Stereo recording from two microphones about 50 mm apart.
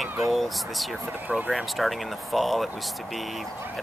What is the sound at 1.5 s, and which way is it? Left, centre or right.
Speech, centre.